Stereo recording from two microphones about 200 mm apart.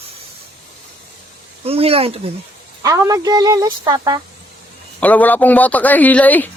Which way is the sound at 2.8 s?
15° right (ahead or behind).